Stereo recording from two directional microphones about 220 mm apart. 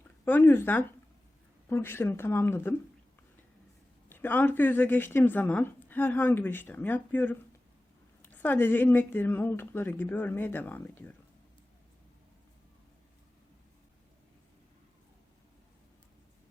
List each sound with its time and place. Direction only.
0.3 s a woman's voice: 10° left (ahead or behind)
4.1 s a woman's voice: 10° left (ahead or behind)